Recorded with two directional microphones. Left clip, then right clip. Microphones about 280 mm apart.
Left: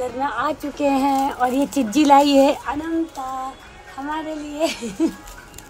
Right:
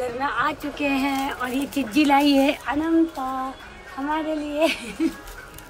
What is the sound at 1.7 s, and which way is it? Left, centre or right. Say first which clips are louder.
Speech: left 3 dB; left.